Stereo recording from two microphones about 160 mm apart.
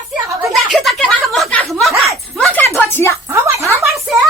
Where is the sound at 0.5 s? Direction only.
Centre (ahead or behind).